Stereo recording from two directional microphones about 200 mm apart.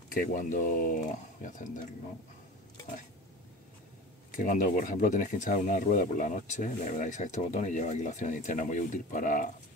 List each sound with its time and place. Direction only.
0.1 s speech: 45° left (ahead or behind)
4.3 s speech: 45° left (ahead or behind)